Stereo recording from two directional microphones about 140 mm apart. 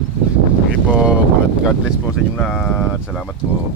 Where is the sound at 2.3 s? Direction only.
5° left (ahead or behind).